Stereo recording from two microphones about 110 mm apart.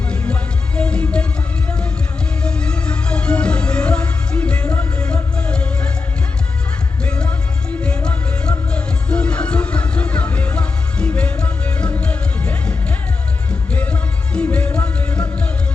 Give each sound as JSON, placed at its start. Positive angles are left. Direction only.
{"t": 0.1, "sound": "music", "side_deg": 10}
{"t": 7.0, "sound": "music", "side_deg": 10}